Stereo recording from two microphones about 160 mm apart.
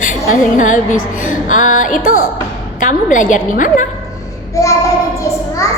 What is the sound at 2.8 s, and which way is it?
A woman's voice, 55° left (ahead or behind).